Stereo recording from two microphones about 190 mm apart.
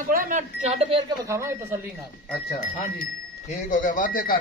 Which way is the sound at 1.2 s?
15° right (ahead or behind).